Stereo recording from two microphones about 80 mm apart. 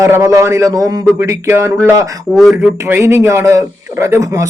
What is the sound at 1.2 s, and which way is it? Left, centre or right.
Speech, right.